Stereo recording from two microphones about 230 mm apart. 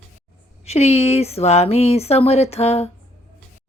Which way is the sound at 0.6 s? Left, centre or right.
Left.